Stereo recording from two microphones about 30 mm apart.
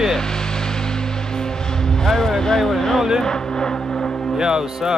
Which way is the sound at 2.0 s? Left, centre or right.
Centre.